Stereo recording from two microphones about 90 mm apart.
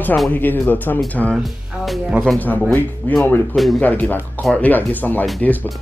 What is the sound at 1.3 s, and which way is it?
Speech, centre (ahead or behind).